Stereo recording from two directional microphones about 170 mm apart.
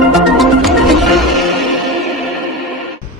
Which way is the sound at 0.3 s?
Centre (ahead or behind).